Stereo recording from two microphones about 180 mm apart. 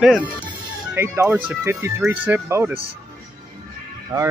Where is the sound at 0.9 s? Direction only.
15° right (ahead or behind).